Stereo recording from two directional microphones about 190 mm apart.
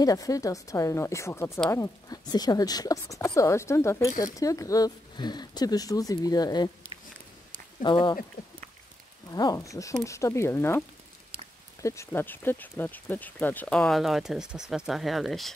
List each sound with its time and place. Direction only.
0.0 s speech: 20° left (ahead or behind)
7.8 s speech: 25° left (ahead or behind)
9.3 s speech: 20° left (ahead or behind)
11.8 s speech: 15° left (ahead or behind); by 15.5 s centre (ahead or behind)